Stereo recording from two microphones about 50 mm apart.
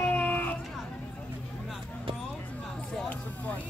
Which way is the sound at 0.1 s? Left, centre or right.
Left.